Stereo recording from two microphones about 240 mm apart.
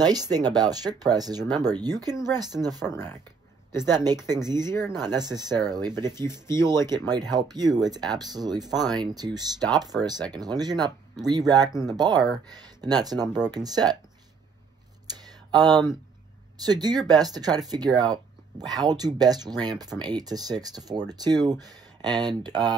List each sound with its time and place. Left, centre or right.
0.0 s speech: centre
4.6 s speech: centre
4.9 s speech: centre
16.6 s speech: centre